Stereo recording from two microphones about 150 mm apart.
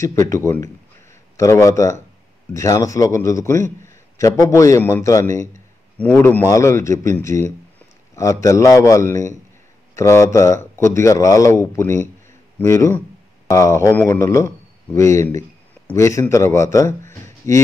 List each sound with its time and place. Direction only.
0.0 s a man's voice: 20° left (ahead or behind)
5.9 s speech: 10° left (ahead or behind)